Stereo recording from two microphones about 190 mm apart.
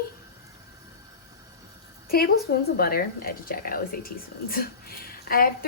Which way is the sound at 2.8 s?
55° left (ahead or behind).